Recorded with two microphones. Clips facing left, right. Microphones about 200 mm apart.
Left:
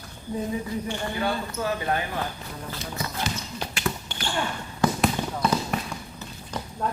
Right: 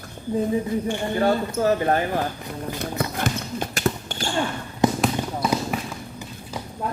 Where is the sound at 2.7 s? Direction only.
55° right (ahead or behind).